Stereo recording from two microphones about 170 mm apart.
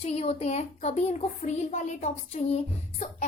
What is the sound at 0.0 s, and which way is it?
A woman's voice, 35° left (ahead or behind).